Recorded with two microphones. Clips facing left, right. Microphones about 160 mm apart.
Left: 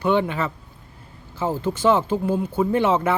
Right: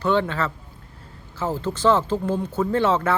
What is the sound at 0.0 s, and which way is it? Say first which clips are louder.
Speech: left 1 dB; 15° left (ahead or behind).